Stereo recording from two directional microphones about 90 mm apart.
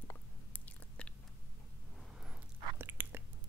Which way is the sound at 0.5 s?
15° left (ahead or behind).